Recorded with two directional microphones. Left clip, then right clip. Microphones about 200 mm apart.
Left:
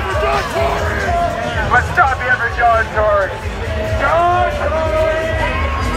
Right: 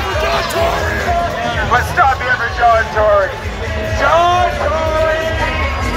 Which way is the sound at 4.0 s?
50° right (ahead or behind).